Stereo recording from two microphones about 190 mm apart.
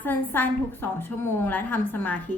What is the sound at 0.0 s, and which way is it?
A woman's voice, 10° left (ahead or behind).